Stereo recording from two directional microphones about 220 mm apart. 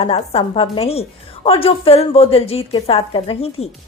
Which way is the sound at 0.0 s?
25° left (ahead or behind).